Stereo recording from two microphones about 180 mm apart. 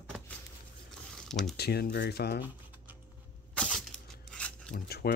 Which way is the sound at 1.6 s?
60° left (ahead or behind).